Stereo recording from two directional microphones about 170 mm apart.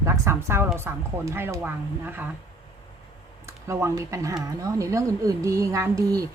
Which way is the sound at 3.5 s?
15° right (ahead or behind).